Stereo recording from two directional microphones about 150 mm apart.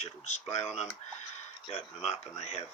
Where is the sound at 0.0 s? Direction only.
50° left (ahead or behind).